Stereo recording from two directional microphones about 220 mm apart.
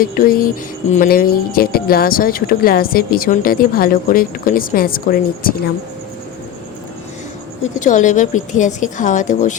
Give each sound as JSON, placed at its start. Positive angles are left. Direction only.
{"t": 0.0, "sound": "speech", "side_deg": 40}
{"t": 7.6, "sound": "speech", "side_deg": 35}